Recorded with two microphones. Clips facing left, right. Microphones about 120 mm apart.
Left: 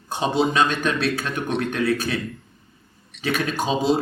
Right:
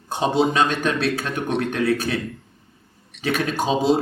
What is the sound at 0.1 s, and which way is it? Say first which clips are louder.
A man's voice: right 2 dB; 50° right (ahead or behind).